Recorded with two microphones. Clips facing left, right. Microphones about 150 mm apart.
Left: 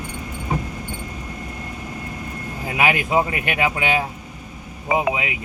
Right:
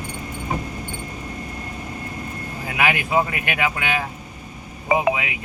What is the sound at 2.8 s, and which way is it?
Speech, 30° left (ahead or behind).